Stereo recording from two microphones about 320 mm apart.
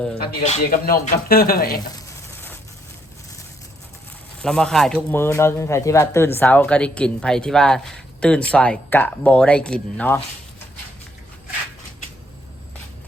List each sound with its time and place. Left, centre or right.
0.2 s speech: left
2.0 s sizzle: centre
4.4 s speech: centre